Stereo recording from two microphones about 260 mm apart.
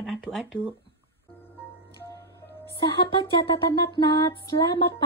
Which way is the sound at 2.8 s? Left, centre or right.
Centre.